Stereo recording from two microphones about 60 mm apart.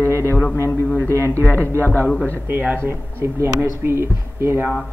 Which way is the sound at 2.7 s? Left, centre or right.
Right.